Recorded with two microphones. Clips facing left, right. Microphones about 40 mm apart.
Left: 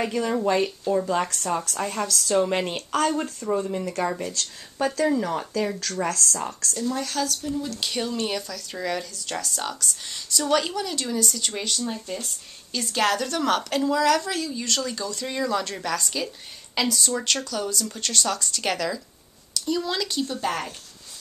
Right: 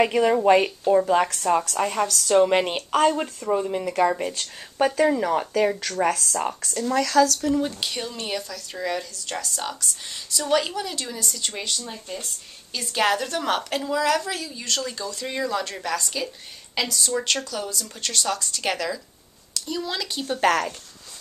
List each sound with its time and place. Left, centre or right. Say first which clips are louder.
0.0 s speech: right 5 dB; right
0.9 s speech: right 5 dB; right
2.2 s speech: right 5 dB; right
7.8 s speech: left 3 dB; centre
20.3 s speech: right 7 dB; right